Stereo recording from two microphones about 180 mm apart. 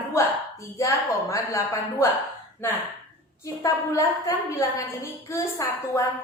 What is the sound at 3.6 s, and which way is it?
A woman's voice, 20° left (ahead or behind).